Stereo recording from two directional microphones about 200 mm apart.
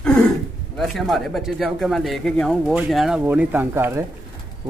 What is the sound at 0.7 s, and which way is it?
Speech, centre (ahead or behind).